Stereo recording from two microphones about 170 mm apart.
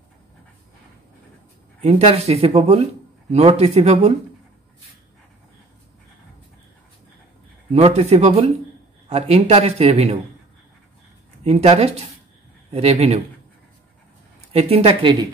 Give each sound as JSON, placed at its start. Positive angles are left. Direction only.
{"t": 1.8, "sound": "speech", "side_deg": -40}
{"t": 7.7, "sound": "speech", "side_deg": -40}
{"t": 11.4, "sound": "speech", "side_deg": -40}
{"t": 14.5, "sound": "speech", "side_deg": -35}